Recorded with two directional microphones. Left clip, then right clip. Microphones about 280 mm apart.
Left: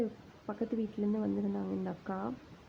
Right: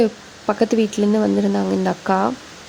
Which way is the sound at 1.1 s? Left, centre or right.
Right.